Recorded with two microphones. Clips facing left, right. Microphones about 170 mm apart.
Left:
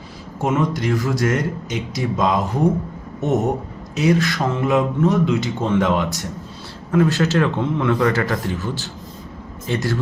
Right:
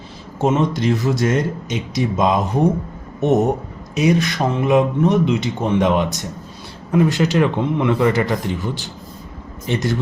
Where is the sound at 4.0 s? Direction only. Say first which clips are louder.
Right 1 dB; 20° right (ahead or behind).